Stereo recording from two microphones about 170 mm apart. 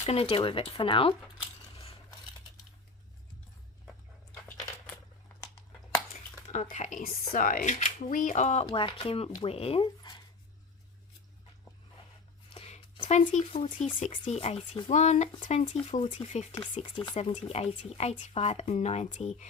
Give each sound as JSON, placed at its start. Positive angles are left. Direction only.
{"t": 0.0, "sound": "speech", "side_deg": 35}
{"t": 1.7, "sound": "scissors", "side_deg": 35}
{"t": 6.5, "sound": "speech", "side_deg": 45}
{"t": 8.6, "sound": "speech", "side_deg": 30}
{"t": 12.5, "sound": "a sound", "side_deg": 35}
{"t": 14.0, "sound": "speech", "side_deg": 45}
{"t": 16.7, "sound": "chopping", "side_deg": 25}
{"t": 17.2, "sound": "speech", "side_deg": 30}